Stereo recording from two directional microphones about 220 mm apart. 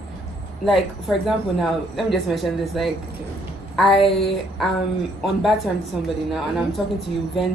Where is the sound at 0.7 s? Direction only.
Centre (ahead or behind).